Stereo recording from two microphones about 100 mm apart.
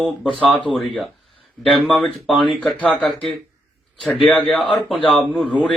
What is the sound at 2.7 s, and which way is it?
Speech, 15° left (ahead or behind).